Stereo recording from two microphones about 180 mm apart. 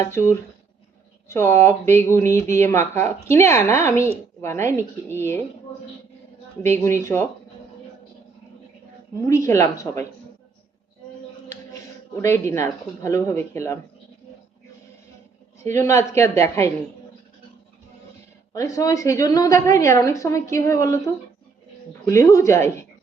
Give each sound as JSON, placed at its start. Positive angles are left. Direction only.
{"t": 0.0, "sound": "a woman's voice", "side_deg": 15}
{"t": 6.6, "sound": "a woman's voice", "side_deg": 15}
{"t": 9.2, "sound": "a woman's voice", "side_deg": 15}
{"t": 12.2, "sound": "a woman's voice", "side_deg": 15}
{"t": 15.8, "sound": "a woman's voice", "side_deg": 15}
{"t": 18.5, "sound": "a woman's voice", "side_deg": 20}
{"t": 22.0, "sound": "a woman's voice", "side_deg": 15}